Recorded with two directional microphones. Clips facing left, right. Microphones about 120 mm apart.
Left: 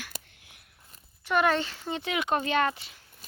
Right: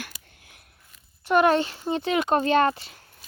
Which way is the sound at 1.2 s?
40° right (ahead or behind).